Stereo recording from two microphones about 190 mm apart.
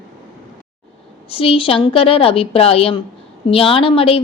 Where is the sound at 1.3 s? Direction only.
30° left (ahead or behind).